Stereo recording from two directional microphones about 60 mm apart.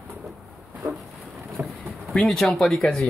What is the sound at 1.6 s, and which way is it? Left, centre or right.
Speech, right.